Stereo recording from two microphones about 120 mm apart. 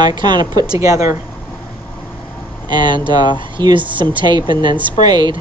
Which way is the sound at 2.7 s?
40° right (ahead or behind).